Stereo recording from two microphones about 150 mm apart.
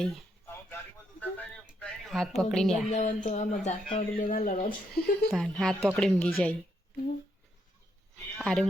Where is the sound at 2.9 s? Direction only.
55° left (ahead or behind).